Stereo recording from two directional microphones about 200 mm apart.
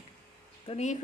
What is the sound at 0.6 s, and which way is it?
Speech, 35° left (ahead or behind).